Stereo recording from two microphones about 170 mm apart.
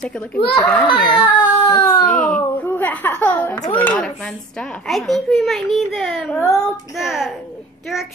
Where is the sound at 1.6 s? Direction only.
25° left (ahead or behind).